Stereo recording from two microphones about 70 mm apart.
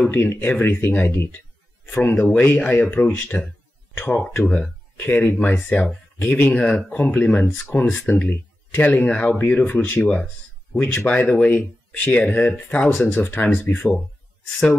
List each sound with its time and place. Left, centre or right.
0.0 s speech: left